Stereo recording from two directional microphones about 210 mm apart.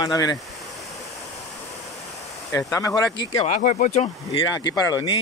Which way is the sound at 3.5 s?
35° left (ahead or behind).